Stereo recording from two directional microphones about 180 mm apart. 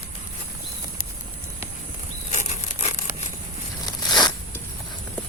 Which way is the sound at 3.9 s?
25° left (ahead or behind).